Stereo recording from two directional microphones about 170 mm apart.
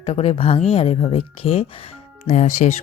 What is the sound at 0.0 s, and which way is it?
Speech, 35° left (ahead or behind).